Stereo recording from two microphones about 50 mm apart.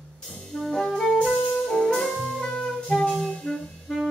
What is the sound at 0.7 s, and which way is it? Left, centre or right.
Music, centre.